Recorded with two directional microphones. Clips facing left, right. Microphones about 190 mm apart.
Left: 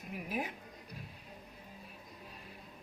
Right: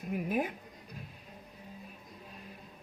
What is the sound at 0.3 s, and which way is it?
Speech, 50° right (ahead or behind).